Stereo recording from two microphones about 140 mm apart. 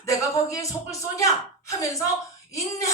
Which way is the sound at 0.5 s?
25° left (ahead or behind).